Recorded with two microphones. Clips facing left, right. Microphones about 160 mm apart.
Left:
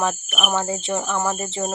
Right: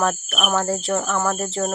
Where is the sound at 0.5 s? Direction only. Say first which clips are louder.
Right 3 dB; centre (ahead or behind).